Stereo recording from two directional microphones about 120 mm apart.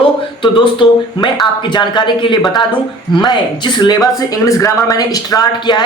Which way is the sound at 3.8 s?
35° left (ahead or behind).